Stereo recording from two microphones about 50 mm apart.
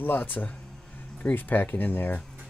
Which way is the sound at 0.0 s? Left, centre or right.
Left.